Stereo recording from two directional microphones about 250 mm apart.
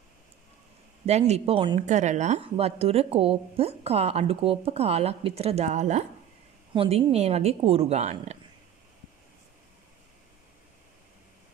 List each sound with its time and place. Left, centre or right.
1.0 s a woman's voice: right